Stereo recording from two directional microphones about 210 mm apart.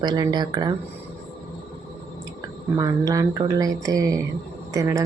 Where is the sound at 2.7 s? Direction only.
15° right (ahead or behind).